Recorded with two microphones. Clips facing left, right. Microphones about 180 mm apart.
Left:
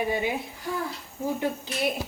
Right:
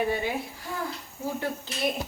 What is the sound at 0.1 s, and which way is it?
Speech, 15° left (ahead or behind).